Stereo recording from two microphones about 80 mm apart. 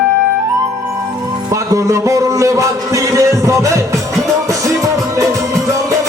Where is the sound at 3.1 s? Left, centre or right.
Right.